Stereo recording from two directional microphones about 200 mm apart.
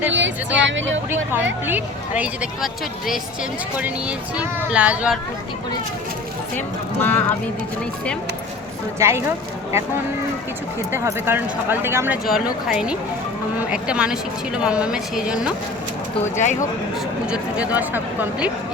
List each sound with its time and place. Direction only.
0.1 s speech: 65° right (ahead or behind)
1.1 s speech: 10° right (ahead or behind)
4.4 s speech: 5° right (ahead or behind)
7.0 s speech: 10° left (ahead or behind)
9.0 s speech: 15° right (ahead or behind)
10.9 s a woman's voice: 10° right (ahead or behind)
17.3 s speech: 5° right (ahead or behind)